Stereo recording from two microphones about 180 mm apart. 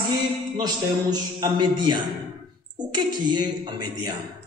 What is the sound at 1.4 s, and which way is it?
A man's voice, 25° right (ahead or behind).